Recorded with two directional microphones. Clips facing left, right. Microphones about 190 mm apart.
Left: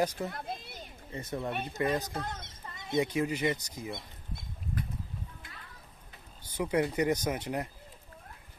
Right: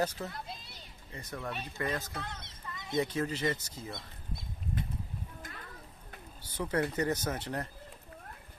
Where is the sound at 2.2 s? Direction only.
45° left (ahead or behind).